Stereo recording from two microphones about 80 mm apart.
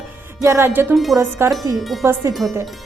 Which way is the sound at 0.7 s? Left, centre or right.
Right.